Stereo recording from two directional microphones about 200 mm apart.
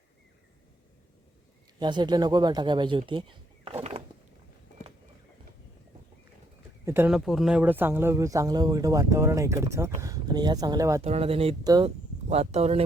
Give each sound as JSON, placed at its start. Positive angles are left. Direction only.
{"t": 1.8, "sound": "speech", "side_deg": -20}
{"t": 6.8, "sound": "speech", "side_deg": -10}
{"t": 11.0, "sound": "speech", "side_deg": -30}